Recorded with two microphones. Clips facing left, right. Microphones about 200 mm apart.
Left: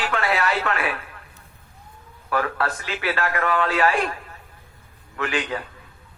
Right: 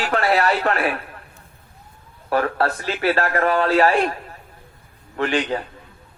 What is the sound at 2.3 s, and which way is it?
A man's voice, 35° right (ahead or behind).